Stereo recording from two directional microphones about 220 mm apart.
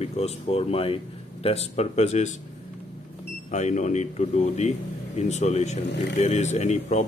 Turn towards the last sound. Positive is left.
turn(degrees=30)  # may be behind; listen again after turning